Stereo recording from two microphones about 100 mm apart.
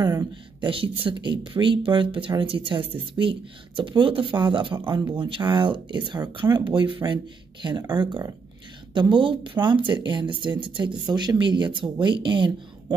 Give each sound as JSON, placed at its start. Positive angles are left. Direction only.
{"t": 0.6, "sound": "speech", "side_deg": -60}
{"t": 8.9, "sound": "speech", "side_deg": -55}